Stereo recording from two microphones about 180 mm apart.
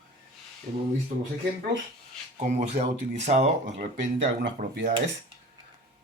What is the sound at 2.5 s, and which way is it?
Speech, 40° right (ahead or behind).